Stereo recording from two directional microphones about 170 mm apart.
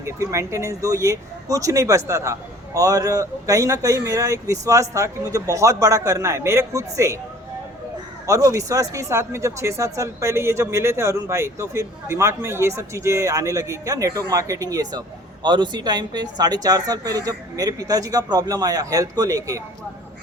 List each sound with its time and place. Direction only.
0.0 s speech: 15° right (ahead or behind)
8.3 s speech: 20° right (ahead or behind)